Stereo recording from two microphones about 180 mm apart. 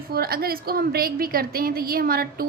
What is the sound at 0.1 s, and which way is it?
A woman's voice, 55° right (ahead or behind).